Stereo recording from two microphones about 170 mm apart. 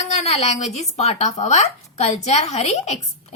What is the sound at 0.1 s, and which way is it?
Speech, 40° left (ahead or behind).